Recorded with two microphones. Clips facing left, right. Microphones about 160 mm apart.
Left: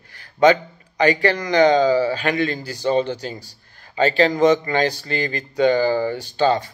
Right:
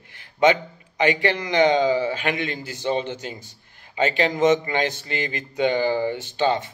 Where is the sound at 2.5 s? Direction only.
40° left (ahead or behind).